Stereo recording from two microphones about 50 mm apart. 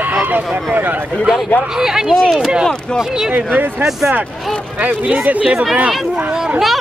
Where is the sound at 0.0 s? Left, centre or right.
Right.